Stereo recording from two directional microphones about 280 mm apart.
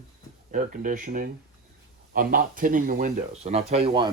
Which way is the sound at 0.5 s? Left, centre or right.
Right.